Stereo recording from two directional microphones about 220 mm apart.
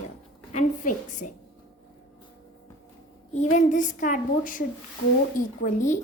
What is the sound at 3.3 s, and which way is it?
A woman's voice, 30° left (ahead or behind).